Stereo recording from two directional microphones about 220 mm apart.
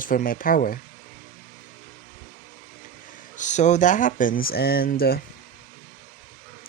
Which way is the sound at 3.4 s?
35° left (ahead or behind).